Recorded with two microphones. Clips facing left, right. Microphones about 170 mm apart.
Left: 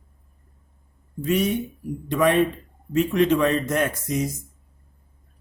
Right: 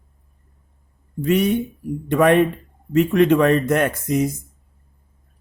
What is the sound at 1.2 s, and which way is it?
Speech, 60° right (ahead or behind).